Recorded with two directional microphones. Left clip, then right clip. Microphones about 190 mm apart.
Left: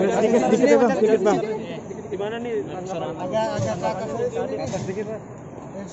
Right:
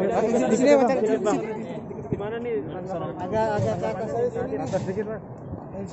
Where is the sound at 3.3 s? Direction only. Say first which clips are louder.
Right 1 dB; 55° right (ahead or behind).